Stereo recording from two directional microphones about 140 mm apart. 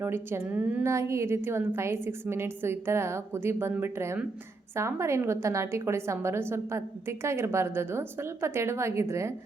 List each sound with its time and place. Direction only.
0.0 s a woman's voice: 15° right (ahead or behind)